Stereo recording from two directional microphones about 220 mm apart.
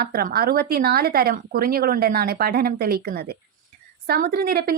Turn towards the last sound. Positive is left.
turn(degrees=-45)  # may be behind; listen again after turning